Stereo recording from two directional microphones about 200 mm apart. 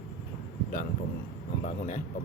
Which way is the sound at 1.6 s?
35° left (ahead or behind).